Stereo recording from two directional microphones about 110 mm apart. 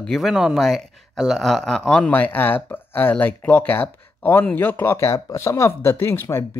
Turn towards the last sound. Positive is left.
turn(degrees=25)  # may be behind; listen again after turning